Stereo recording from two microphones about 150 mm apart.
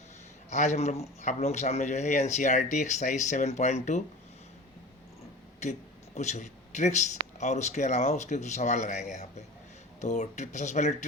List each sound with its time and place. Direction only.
0.5 s speech: 50° left (ahead or behind)
6.1 s speech: 50° left (ahead or behind)